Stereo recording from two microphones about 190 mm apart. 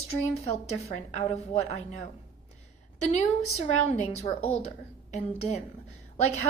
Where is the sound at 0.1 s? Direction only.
35° left (ahead or behind).